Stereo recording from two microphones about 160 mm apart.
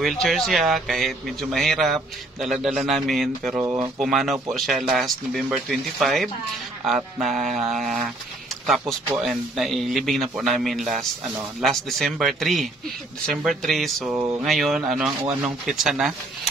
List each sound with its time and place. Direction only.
0.0 s speech: centre (ahead or behind)
3.5 s speech: 25° right (ahead or behind)
4.0 s speech: centre (ahead or behind)
14.1 s a sound: 15° right (ahead or behind)
14.4 s speech: centre (ahead or behind)